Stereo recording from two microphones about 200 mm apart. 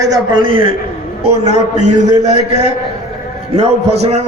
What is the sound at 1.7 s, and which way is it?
A man's voice, 35° right (ahead or behind).